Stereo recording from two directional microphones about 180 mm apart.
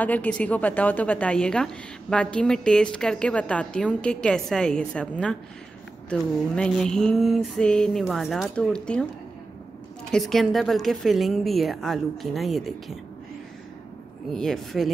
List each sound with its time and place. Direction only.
0.0 s a woman's voice: 10° left (ahead or behind)
10.1 s a woman's voice: centre (ahead or behind)
14.3 s a woman's voice: centre (ahead or behind)